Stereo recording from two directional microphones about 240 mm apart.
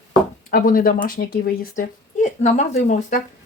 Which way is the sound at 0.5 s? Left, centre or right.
Left.